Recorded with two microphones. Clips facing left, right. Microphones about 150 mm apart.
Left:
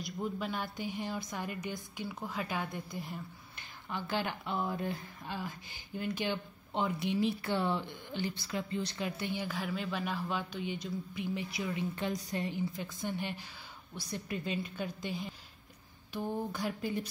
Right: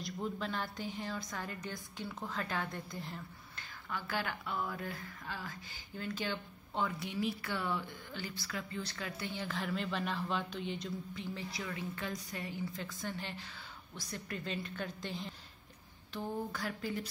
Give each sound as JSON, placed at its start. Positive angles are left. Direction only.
{"t": 0.0, "sound": "a woman's voice", "side_deg": 5}